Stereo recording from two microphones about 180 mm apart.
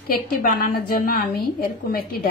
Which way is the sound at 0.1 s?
50° left (ahead or behind).